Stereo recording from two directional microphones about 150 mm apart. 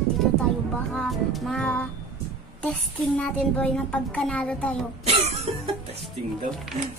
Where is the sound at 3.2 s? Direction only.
10° left (ahead or behind).